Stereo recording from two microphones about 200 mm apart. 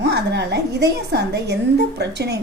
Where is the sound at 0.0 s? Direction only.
55° right (ahead or behind).